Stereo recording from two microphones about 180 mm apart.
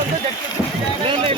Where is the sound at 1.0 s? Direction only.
30° right (ahead or behind).